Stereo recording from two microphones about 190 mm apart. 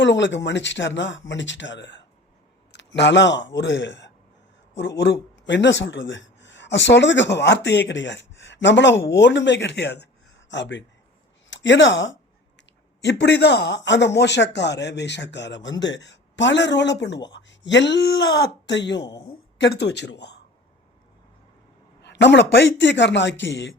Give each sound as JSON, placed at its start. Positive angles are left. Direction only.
{"t": 0.0, "sound": "speech", "side_deg": 70}
{"t": 13.0, "sound": "speech", "side_deg": 65}
{"t": 22.0, "sound": "speech", "side_deg": 65}